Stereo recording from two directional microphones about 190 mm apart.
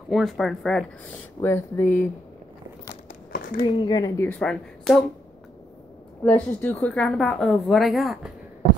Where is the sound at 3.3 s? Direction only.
50° left (ahead or behind).